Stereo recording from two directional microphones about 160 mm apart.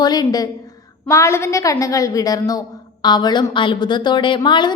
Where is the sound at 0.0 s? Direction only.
25° left (ahead or behind).